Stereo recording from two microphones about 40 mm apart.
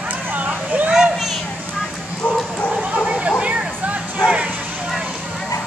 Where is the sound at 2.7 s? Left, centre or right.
Right.